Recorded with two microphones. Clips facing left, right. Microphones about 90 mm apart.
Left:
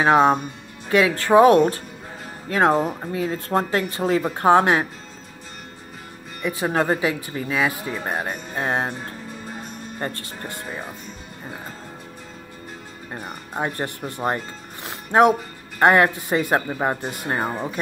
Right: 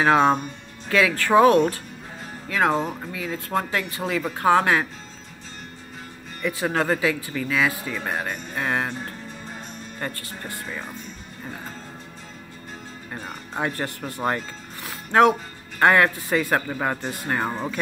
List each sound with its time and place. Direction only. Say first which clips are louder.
0.0 s a man's voice: left 2 dB; 20° left (ahead or behind)
6.4 s a man's voice: left 2 dB; 20° left (ahead or behind)
13.2 s a man's voice: left 1 dB; 15° left (ahead or behind)